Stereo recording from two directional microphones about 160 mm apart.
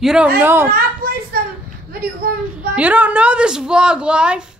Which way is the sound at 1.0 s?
70° right (ahead or behind).